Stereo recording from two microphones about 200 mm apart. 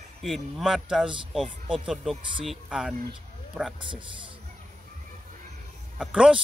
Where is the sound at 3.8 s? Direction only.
25° right (ahead or behind).